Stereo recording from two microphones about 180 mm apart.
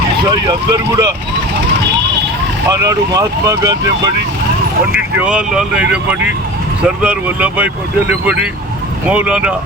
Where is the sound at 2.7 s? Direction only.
20° right (ahead or behind).